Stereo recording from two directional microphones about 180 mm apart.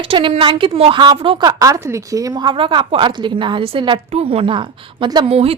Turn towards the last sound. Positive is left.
turn(degrees=-35)  # may be behind; listen again after turning